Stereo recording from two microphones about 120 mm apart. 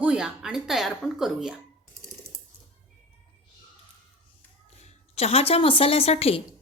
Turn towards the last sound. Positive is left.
turn(degrees=60)  # may be behind; listen again after turning